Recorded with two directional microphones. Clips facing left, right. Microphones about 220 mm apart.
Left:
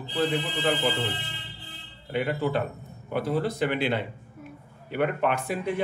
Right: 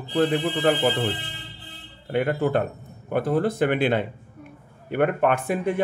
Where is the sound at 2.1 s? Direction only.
50° right (ahead or behind).